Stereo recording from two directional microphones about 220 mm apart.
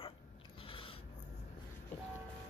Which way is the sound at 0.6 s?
25° left (ahead or behind).